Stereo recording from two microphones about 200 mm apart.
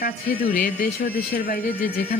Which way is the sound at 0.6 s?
50° left (ahead or behind).